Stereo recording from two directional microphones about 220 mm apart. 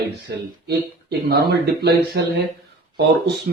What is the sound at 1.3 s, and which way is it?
Speech, 45° right (ahead or behind).